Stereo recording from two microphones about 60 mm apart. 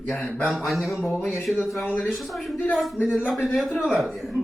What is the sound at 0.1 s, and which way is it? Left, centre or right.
Speech, left.